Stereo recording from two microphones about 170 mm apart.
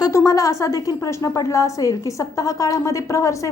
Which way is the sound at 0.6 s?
20° left (ahead or behind).